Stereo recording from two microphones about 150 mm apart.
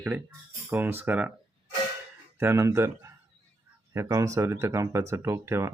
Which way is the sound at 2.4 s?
20° right (ahead or behind).